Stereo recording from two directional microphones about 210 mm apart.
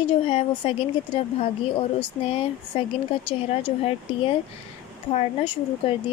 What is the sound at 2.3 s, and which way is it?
Speech, 25° left (ahead or behind).